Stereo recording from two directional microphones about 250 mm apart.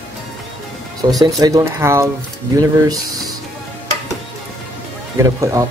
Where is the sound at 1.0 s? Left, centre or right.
Centre.